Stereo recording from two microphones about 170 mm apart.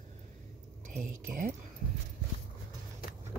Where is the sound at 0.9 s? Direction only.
50° right (ahead or behind).